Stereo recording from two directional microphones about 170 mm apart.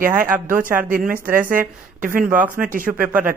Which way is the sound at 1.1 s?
55° right (ahead or behind).